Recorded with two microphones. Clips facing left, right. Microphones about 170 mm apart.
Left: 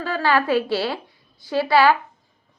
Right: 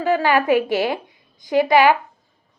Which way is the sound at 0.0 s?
15° right (ahead or behind).